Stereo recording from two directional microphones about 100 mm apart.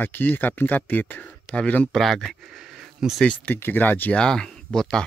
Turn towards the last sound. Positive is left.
turn(degrees=5)  # may be behind; listen again after turning